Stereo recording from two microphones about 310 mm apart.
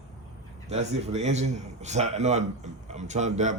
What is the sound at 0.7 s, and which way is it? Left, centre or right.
A man's voice, right.